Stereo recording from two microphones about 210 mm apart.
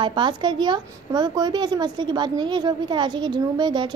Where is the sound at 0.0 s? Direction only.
20° right (ahead or behind).